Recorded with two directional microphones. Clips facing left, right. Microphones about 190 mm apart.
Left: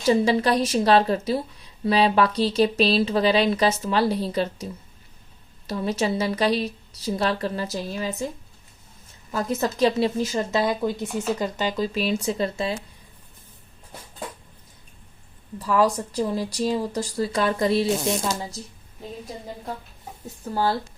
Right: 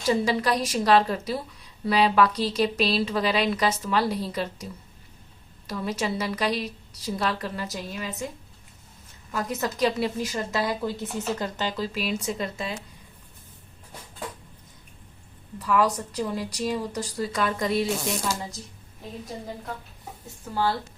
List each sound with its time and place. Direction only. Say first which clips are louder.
0.0 s speech: left 4 dB; 25° left (ahead or behind)
9.3 s speech: left 4 dB; 25° left (ahead or behind)
11.9 s speech: left 5 dB; 25° left (ahead or behind)
15.5 s speech: left 2 dB; 30° left (ahead or behind)
17.8 s speech: left 4 dB; 20° left (ahead or behind)
20.2 s speech: left 2 dB; 40° left (ahead or behind)